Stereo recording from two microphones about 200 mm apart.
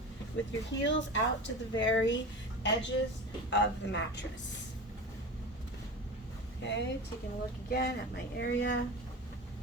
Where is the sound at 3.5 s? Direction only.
65° left (ahead or behind).